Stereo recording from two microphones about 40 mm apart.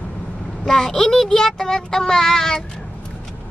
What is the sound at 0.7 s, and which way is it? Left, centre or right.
Child singing, centre.